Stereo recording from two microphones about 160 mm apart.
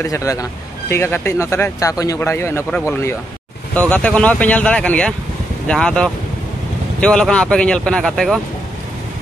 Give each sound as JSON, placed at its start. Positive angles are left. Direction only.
{"t": 0.0, "sound": "speech", "side_deg": 20}